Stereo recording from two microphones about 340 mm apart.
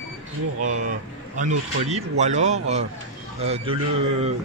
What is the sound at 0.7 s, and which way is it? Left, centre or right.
A man's voice, right.